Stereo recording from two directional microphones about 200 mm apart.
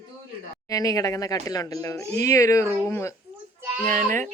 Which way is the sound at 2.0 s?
35° right (ahead or behind).